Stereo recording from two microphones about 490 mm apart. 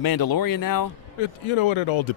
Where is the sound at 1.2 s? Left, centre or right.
Left.